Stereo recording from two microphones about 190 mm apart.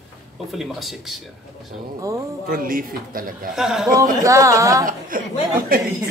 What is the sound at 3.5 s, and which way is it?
Speech, centre (ahead or behind).